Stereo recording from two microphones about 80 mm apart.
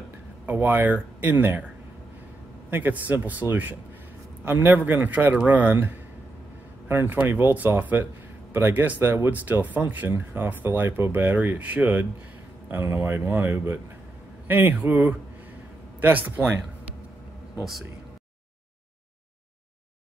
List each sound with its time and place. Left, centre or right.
0.5 s speech: right
2.7 s a man's voice: right